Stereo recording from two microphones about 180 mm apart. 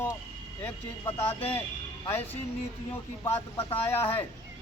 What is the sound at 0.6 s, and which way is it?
Speech, 10° left (ahead or behind).